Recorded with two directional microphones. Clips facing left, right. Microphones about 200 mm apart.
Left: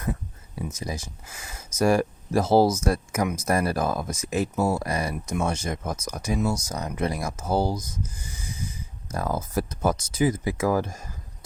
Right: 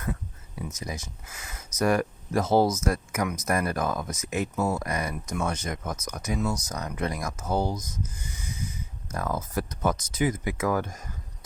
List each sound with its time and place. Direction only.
0.7 s speech: 30° left (ahead or behind)